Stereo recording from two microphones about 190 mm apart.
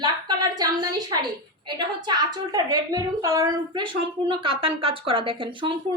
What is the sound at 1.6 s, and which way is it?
A woman's voice, 25° right (ahead or behind).